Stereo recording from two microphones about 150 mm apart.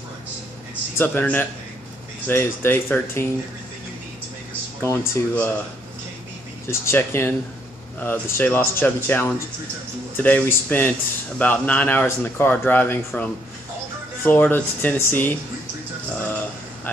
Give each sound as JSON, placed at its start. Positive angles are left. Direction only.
{"t": 0.9, "sound": "speech", "side_deg": 10}
{"t": 4.8, "sound": "speech", "side_deg": 15}
{"t": 6.7, "sound": "speech", "side_deg": 15}